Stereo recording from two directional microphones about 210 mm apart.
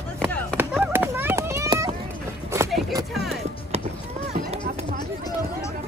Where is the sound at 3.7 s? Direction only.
30° right (ahead or behind).